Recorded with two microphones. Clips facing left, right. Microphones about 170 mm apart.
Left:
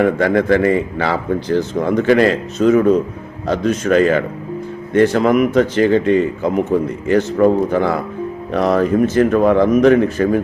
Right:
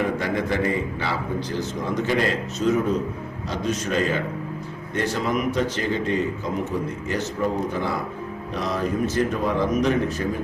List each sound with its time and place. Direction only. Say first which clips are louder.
0.0 s a man's voice: left 10 dB; 65° left (ahead or behind)
3.4 s a man's voice: left 10 dB; 60° left (ahead or behind)